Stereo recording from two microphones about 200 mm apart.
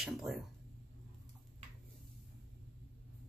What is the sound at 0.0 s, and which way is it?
Speech, centre (ahead or behind).